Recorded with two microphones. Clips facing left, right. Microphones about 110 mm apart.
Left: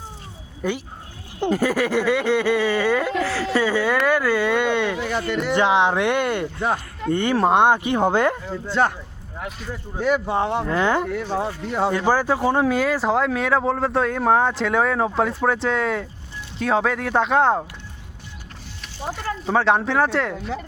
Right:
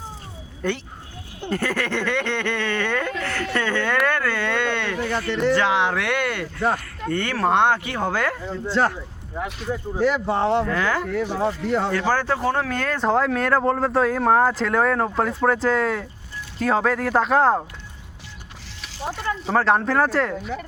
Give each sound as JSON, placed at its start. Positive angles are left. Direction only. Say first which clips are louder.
{"t": 0.6, "sound": "speech", "louder": "left 1 dB", "side_deg": 10}
{"t": 8.6, "sound": "speech", "louder": "left 1 dB", "side_deg": 0}
{"t": 10.0, "sound": "speech", "louder": "even", "side_deg": 0}
{"t": 10.7, "sound": "speech", "louder": "left 3 dB", "side_deg": 20}
{"t": 11.3, "sound": "speech", "louder": "right 1 dB", "side_deg": 5}
{"t": 11.9, "sound": "speech", "louder": "left 2 dB", "side_deg": 15}
{"t": 19.5, "sound": "speech", "louder": "left 1 dB", "side_deg": 0}